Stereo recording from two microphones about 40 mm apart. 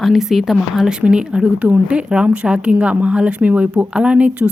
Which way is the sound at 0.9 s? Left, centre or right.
Right.